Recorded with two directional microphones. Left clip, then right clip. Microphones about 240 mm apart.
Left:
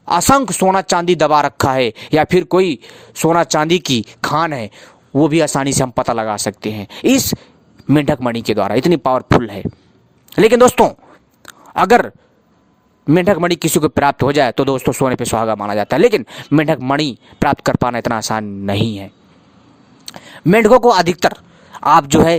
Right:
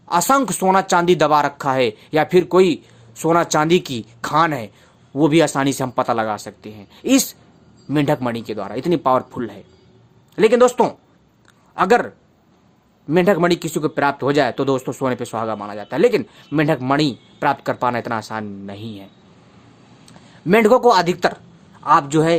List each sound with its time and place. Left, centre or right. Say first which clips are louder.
0.0 s speech: left 4 dB; left
11.4 s a sound: left 4 dB; left
13.1 s speech: left 2 dB; left